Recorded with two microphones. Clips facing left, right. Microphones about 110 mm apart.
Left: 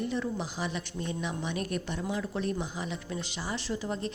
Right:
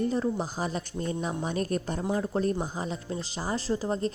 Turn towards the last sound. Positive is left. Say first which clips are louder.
# right 5 dB
turn(degrees=-35)  # may be behind; listen again after turning